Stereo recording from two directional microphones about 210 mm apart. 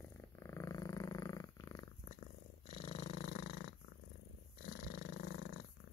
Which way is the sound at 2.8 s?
30° left (ahead or behind).